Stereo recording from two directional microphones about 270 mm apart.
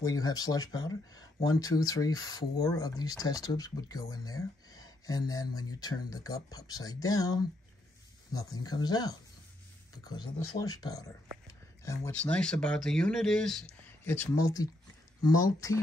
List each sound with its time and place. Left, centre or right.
0.0 s speech: centre